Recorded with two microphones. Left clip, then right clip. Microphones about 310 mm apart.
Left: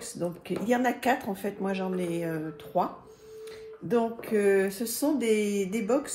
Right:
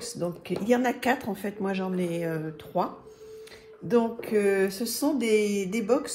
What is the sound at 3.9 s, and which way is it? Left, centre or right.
Speech, centre.